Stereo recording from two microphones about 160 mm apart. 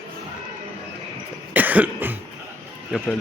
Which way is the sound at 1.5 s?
10° right (ahead or behind).